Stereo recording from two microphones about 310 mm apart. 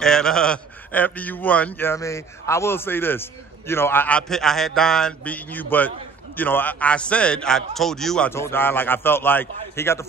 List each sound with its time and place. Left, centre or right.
0.0 s a man's voice: centre